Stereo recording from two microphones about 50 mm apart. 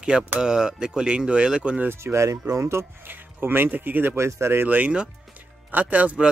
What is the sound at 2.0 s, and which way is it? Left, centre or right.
Speech, right.